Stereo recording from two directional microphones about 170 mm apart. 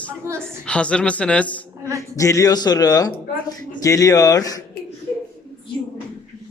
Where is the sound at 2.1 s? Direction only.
20° left (ahead or behind).